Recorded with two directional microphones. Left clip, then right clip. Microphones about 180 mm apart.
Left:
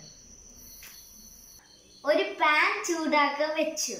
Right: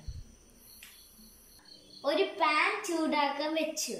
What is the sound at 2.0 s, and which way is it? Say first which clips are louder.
Speech: left 4 dB; 20° right (ahead or behind).